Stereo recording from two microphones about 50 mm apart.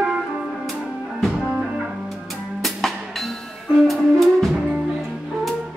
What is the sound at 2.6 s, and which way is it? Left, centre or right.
Drum, centre.